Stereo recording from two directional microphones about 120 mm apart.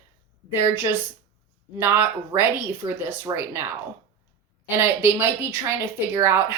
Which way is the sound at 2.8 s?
35° right (ahead or behind).